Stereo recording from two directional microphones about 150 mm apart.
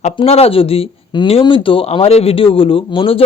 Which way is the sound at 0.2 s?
40° left (ahead or behind).